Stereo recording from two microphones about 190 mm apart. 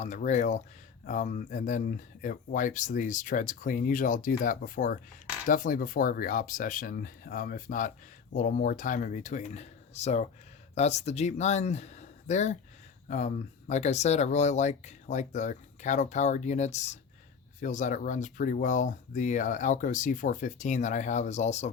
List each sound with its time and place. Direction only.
0.0 s speech: 40° left (ahead or behind)